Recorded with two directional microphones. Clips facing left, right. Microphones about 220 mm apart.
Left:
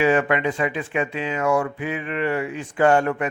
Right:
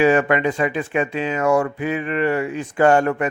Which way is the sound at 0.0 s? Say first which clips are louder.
Right 3 dB; 40° right (ahead or behind).